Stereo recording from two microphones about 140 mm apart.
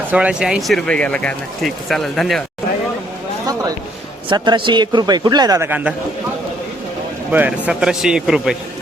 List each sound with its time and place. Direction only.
0.1 s speech: 10° right (ahead or behind)
0.9 s speech: 10° left (ahead or behind)
4.3 s a man's voice: 35° right (ahead or behind); by 5.9 s 15° right (ahead or behind)
7.3 s speech: 10° right (ahead or behind)